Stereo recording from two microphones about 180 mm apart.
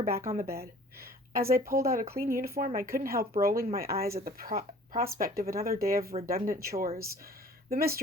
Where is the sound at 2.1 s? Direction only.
50° right (ahead or behind).